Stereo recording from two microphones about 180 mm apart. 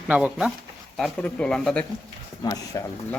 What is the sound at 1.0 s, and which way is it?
Speech, 5° left (ahead or behind).